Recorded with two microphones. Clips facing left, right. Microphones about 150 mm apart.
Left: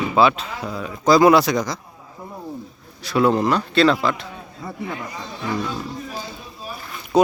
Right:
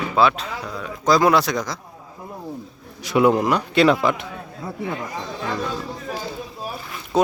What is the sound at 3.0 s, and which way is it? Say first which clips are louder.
A man's voice: right 1 dB; 20° right (ahead or behind).